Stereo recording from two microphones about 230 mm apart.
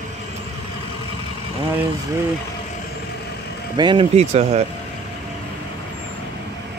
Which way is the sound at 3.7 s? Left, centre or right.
Centre.